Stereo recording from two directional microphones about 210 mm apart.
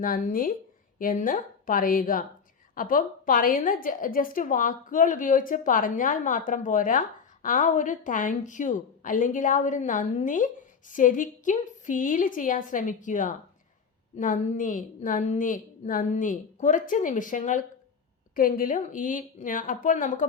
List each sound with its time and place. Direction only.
0.0 s a woman's voice: 40° left (ahead or behind)